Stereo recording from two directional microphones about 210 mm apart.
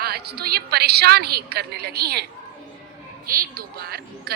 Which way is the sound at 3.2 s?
40° right (ahead or behind).